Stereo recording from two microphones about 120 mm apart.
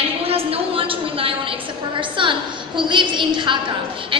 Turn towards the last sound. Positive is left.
turn(degrees=-40)  # may be behind; listen again after turning